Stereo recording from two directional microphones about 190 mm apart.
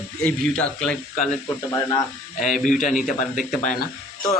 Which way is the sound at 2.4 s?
45° left (ahead or behind).